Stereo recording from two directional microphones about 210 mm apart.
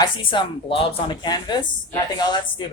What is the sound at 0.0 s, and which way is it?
Speech, 25° left (ahead or behind).